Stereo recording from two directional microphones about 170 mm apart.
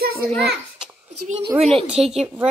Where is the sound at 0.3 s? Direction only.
Centre (ahead or behind).